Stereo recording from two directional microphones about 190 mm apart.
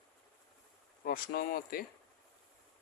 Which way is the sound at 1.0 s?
50° left (ahead or behind).